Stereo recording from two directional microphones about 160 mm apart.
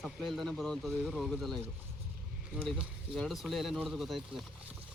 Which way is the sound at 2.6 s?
Centre (ahead or behind).